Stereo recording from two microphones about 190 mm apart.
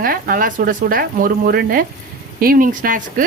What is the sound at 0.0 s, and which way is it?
Speech, 50° right (ahead or behind).